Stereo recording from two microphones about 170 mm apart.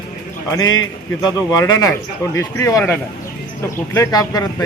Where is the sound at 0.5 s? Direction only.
20° left (ahead or behind).